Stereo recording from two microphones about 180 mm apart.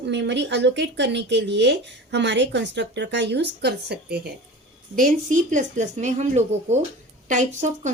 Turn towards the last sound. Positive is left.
turn(degrees=-40)  # may be behind; listen again after turning